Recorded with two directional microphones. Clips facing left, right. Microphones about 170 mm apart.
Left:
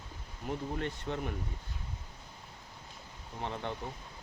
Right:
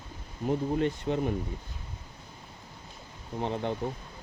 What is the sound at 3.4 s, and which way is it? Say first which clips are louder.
Speech: right 7 dB; 20° right (ahead or behind).